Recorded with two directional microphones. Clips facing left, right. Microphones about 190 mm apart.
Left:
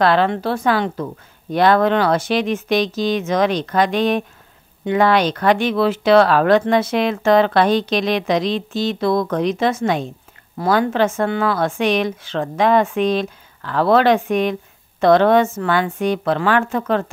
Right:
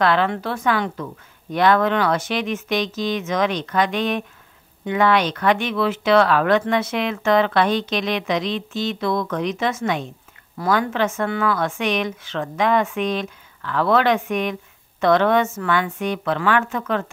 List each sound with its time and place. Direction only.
0.0 s a woman's voice: 35° left (ahead or behind)